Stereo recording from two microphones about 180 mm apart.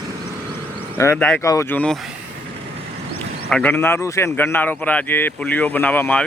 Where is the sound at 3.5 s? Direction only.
10° left (ahead or behind).